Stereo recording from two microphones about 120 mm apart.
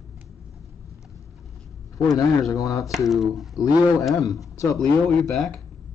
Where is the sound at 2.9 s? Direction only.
Centre (ahead or behind).